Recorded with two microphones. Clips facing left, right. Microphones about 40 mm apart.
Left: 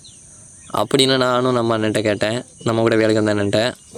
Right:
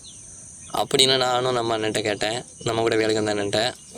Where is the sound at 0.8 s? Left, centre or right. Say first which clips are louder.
Left 4 dB; centre.